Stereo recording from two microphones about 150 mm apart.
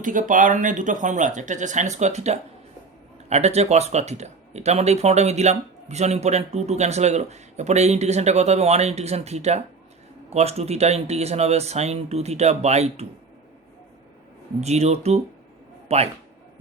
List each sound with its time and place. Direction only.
0.0 s speech: 60° right (ahead or behind)
14.6 s speech: 45° right (ahead or behind)